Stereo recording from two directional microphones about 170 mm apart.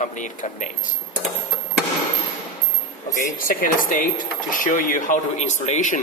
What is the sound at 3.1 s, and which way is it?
Speech, 50° left (ahead or behind).